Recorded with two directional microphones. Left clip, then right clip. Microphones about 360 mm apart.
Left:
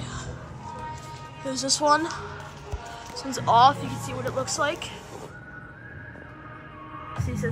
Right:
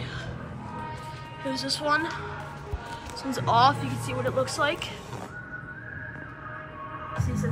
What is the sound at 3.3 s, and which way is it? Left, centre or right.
Speech, centre.